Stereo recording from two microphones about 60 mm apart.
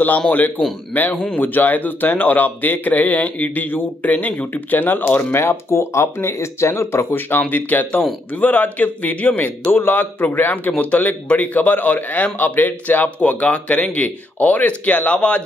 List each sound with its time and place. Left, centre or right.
0.9 s a man's voice: left
5.3 s a man's voice: left; by 15.4 s centre